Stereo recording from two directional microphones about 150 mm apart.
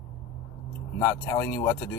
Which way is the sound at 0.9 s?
15° left (ahead or behind).